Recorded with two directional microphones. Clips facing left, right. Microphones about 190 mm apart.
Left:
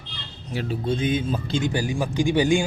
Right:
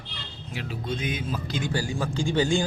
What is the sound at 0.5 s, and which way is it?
Speech, 35° left (ahead or behind).